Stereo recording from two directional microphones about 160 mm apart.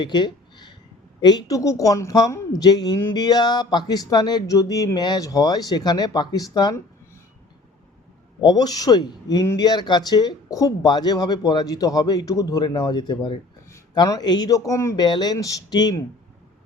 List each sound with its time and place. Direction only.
0.0 s a sound: 25° left (ahead or behind)
1.2 s a woman's voice: 25° left (ahead or behind)
8.4 s a woman's voice: 25° left (ahead or behind)